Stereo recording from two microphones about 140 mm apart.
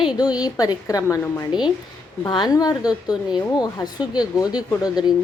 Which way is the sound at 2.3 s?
30° left (ahead or behind).